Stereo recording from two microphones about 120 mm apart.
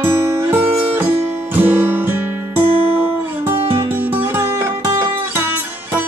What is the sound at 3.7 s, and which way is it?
Music, 20° right (ahead or behind).